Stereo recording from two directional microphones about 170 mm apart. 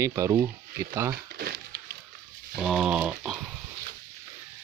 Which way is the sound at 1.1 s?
65° right (ahead or behind).